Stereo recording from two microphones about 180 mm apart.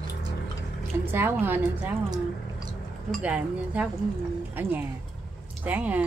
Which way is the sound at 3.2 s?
5° right (ahead or behind).